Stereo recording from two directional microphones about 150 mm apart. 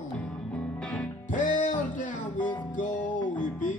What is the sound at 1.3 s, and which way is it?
Music, 60° left (ahead or behind).